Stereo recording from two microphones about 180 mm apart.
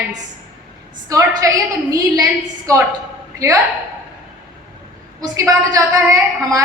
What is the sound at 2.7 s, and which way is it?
Speech, 20° right (ahead or behind).